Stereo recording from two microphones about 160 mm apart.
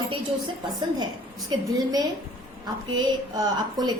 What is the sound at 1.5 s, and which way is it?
Speech, 25° right (ahead or behind).